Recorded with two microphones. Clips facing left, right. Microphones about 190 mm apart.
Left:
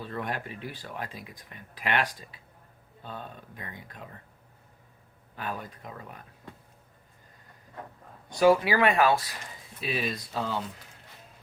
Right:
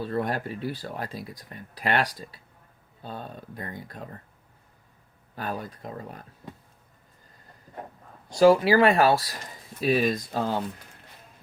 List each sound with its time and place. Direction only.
0.0 s speech: 35° right (ahead or behind)
5.4 s speech: 35° right (ahead or behind)
8.3 s speech: 30° right (ahead or behind)